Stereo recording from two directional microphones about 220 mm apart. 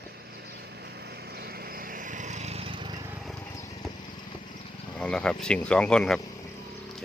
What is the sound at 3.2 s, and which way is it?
Horse, centre (ahead or behind).